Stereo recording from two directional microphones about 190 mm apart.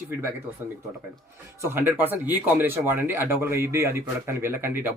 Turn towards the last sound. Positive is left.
turn(degrees=-10)  # may be behind; listen again after turning